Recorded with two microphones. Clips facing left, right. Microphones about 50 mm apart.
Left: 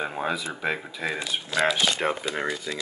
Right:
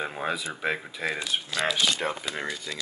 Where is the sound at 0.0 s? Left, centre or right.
Centre.